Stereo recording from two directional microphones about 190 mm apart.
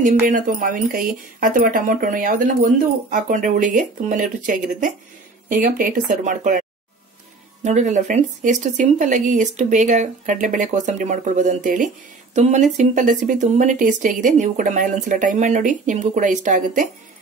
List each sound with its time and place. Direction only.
0.3 s speech: 45° right (ahead or behind)
7.6 s speech: 40° right (ahead or behind)